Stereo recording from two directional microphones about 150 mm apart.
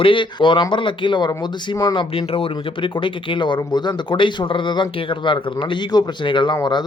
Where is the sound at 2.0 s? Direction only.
40° left (ahead or behind).